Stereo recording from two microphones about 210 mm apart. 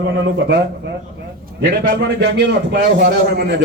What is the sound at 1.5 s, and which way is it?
A man's voice, 45° right (ahead or behind).